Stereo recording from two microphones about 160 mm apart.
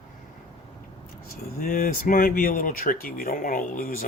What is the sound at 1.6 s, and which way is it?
Speech, 60° left (ahead or behind).